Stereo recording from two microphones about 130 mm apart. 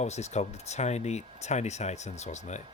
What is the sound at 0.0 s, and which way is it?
Speech, 60° left (ahead or behind).